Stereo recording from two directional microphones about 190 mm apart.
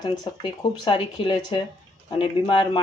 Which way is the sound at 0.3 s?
25° left (ahead or behind).